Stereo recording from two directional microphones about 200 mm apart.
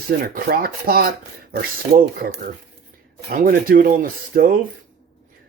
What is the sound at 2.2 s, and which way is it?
Speech, 50° right (ahead or behind).